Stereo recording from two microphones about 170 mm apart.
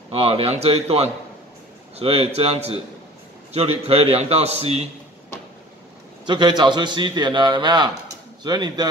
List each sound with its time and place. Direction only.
0.1 s a man's voice: 35° right (ahead or behind)
6.2 s a man's voice: 25° right (ahead or behind)